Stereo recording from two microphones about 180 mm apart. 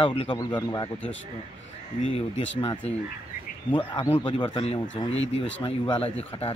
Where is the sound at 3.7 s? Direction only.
15° left (ahead or behind).